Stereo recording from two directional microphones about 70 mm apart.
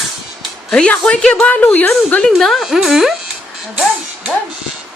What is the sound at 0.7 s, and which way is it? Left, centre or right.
A woman's voice, centre.